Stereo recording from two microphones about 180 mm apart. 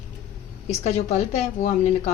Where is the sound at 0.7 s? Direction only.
35° left (ahead or behind).